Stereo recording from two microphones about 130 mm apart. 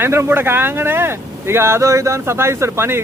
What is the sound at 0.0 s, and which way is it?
Speech, 20° right (ahead or behind).